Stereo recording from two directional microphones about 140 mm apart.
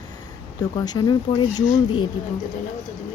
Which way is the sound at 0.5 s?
25° left (ahead or behind).